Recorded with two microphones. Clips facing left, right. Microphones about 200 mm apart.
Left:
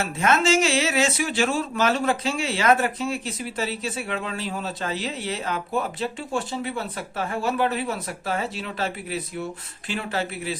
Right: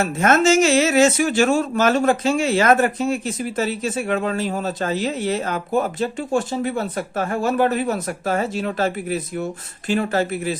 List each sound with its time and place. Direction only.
0.0 s speech: 45° right (ahead or behind)